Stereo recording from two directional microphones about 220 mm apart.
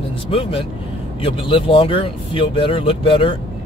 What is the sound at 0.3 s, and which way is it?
Speech, 25° left (ahead or behind).